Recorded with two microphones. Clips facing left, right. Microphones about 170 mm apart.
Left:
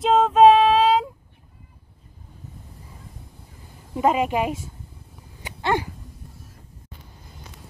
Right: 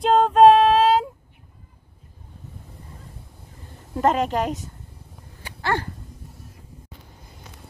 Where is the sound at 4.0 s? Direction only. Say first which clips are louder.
Even; 5° left (ahead or behind).